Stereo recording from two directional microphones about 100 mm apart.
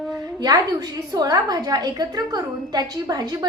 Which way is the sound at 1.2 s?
40° right (ahead or behind).